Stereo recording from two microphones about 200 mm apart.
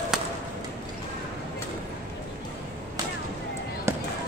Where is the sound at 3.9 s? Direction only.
15° right (ahead or behind).